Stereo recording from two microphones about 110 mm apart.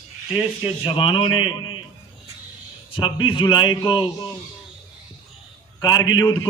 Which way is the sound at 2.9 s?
50° left (ahead or behind).